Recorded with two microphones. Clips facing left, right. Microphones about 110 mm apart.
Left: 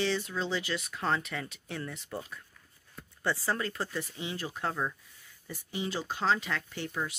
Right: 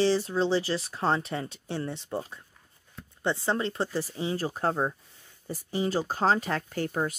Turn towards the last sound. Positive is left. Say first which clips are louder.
# right 6 dB
turn(degrees=-45)  # may be behind; listen again after turning